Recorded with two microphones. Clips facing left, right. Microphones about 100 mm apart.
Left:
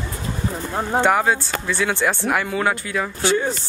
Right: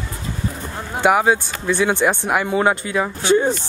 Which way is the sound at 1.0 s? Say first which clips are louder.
Right 3 dB; 10° right (ahead or behind).